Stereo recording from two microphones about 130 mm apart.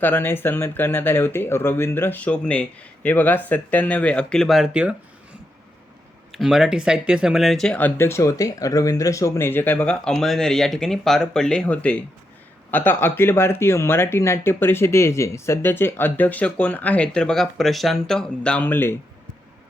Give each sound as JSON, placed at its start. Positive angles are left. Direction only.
{"t": 0.0, "sound": "speech", "side_deg": 15}
{"t": 6.3, "sound": "speech", "side_deg": -5}